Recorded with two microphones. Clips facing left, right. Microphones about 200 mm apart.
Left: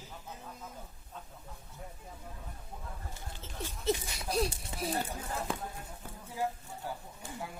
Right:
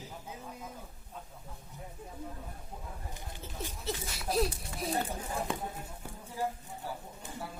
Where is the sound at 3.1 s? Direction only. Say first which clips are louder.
Right 2 dB; 15° right (ahead or behind).